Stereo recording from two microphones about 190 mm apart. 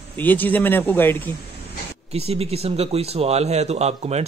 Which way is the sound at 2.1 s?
30° right (ahead or behind).